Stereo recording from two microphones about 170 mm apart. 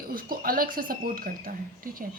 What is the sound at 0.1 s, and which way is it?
A woman's voice, 60° right (ahead or behind).